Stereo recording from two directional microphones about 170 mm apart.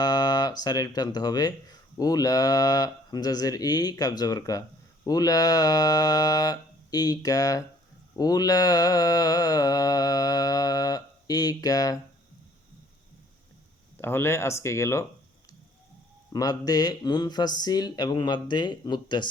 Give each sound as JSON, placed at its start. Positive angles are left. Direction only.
{"t": 0.0, "sound": "speech", "side_deg": 25}
{"t": 8.1, "sound": "mantra", "side_deg": 20}
{"t": 14.0, "sound": "speech", "side_deg": 15}
{"t": 16.3, "sound": "speech", "side_deg": 20}